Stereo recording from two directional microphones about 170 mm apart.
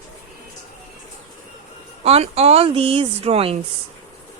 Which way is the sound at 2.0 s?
35° right (ahead or behind).